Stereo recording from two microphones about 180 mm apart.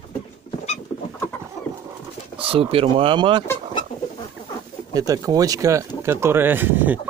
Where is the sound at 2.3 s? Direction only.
30° right (ahead or behind).